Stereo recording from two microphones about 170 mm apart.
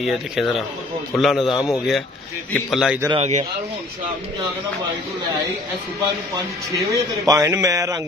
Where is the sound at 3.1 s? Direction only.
40° right (ahead or behind).